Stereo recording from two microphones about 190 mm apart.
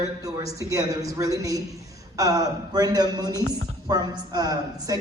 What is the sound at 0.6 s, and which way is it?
A woman's voice, 15° right (ahead or behind).